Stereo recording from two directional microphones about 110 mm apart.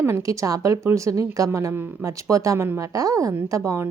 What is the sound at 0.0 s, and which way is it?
A woman's voice, 30° right (ahead or behind).